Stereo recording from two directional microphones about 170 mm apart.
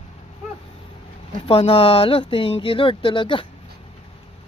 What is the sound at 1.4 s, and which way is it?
Speech, 35° left (ahead or behind).